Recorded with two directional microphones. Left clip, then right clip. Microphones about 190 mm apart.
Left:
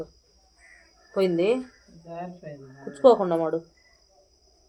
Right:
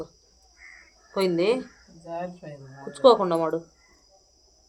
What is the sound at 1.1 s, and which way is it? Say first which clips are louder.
Speech: even; 10° right (ahead or behind).